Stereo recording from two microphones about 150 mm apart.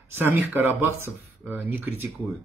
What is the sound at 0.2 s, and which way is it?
Speech, 15° right (ahead or behind).